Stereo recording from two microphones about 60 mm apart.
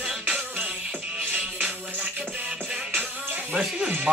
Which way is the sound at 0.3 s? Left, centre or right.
Right.